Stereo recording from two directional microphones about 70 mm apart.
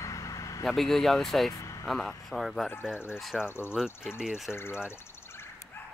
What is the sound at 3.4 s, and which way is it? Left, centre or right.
Speech, left.